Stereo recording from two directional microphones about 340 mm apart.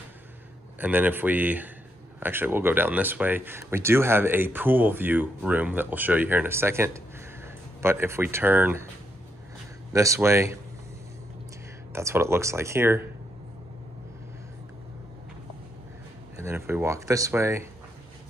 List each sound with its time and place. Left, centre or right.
0.7 s speech: centre
9.9 s speech: centre
11.9 s speech: centre
16.3 s speech: centre